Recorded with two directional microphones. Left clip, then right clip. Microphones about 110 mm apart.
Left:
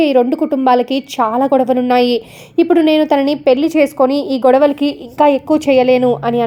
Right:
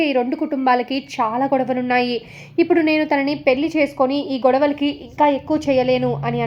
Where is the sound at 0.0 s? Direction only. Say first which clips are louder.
Left 7 dB; 50° left (ahead or behind).